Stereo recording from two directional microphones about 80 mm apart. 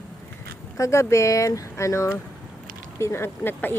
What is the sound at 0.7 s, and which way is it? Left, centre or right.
Speech, left.